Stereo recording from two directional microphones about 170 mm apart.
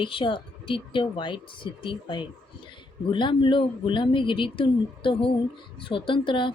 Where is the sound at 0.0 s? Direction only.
30° left (ahead or behind).